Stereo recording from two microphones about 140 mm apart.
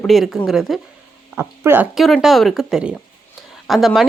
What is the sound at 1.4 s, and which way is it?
Speech, 15° right (ahead or behind).